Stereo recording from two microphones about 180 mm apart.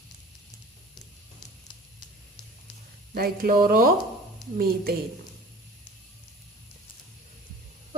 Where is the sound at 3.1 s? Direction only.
55° right (ahead or behind).